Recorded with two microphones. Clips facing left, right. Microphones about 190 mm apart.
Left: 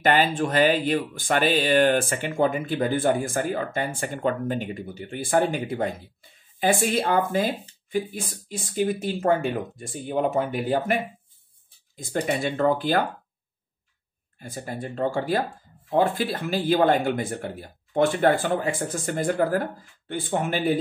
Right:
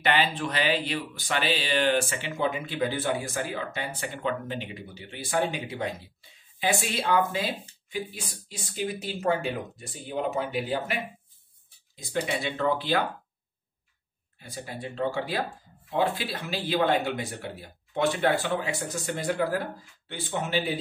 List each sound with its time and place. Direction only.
0.0 s speech: 45° left (ahead or behind)
14.4 s speech: 50° left (ahead or behind)